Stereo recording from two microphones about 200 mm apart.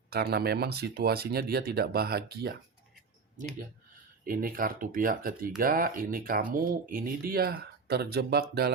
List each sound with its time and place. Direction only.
0.1 s speech: 50° right (ahead or behind)
4.2 s speech: 45° right (ahead or behind)